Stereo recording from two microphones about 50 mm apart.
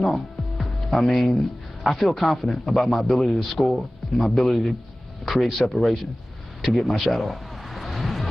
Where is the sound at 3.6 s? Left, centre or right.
Left.